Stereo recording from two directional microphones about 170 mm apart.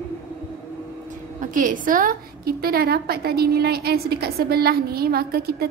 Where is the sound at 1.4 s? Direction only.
50° right (ahead or behind).